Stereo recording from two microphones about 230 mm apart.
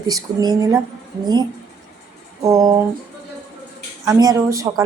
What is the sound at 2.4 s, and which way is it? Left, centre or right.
Speech, centre.